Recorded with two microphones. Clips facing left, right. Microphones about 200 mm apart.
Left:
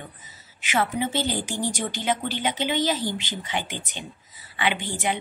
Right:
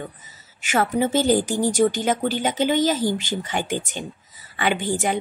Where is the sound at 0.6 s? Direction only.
45° right (ahead or behind).